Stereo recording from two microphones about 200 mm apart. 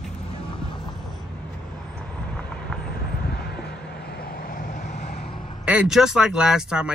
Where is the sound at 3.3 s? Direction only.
55° left (ahead or behind); by 5.4 s 30° left (ahead or behind).